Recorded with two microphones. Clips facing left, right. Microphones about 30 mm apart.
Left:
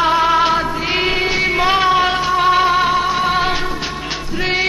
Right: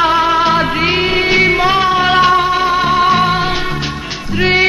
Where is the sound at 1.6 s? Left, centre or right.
Centre.